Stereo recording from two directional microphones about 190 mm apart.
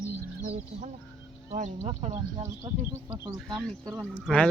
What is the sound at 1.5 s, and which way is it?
Speech, 35° right (ahead or behind).